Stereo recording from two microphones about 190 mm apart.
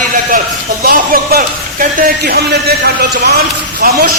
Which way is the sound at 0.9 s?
50° right (ahead or behind).